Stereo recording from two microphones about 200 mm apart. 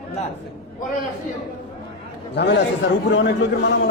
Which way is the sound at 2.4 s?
60° left (ahead or behind).